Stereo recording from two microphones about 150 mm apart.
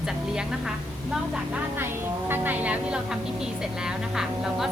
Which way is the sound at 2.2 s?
15° right (ahead or behind).